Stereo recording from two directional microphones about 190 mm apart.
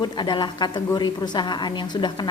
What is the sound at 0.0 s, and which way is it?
A woman's voice, 25° left (ahead or behind).